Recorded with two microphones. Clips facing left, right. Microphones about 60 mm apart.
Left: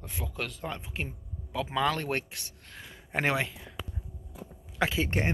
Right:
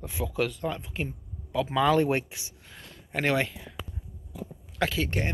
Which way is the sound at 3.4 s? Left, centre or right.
Centre.